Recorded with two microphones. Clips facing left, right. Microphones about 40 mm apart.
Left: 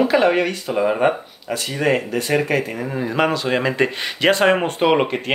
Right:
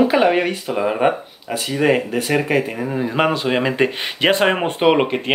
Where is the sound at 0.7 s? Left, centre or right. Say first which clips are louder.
Even; centre.